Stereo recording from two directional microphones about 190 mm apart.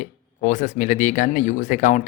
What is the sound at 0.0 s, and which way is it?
A man's voice, 40° left (ahead or behind).